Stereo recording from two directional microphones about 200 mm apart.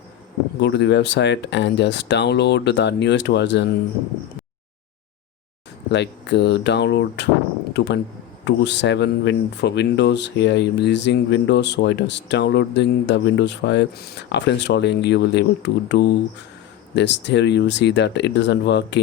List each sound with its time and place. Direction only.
0.6 s speech: 60° left (ahead or behind)
5.9 s speech: 60° left (ahead or behind)